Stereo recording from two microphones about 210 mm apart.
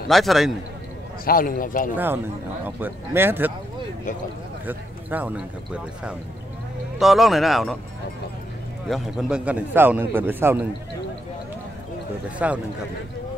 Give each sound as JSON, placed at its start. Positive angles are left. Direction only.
{"t": 0.1, "sound": "speech", "side_deg": 0}
{"t": 1.2, "sound": "a man's voice", "side_deg": 40}
{"t": 2.6, "sound": "a man's voice", "side_deg": -10}
{"t": 4.6, "sound": "a man's voice", "side_deg": -10}
{"t": 8.8, "sound": "a man's voice", "side_deg": 0}
{"t": 12.4, "sound": "a man's voice", "side_deg": -5}